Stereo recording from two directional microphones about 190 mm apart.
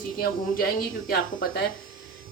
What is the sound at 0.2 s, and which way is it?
Speech, 50° left (ahead or behind).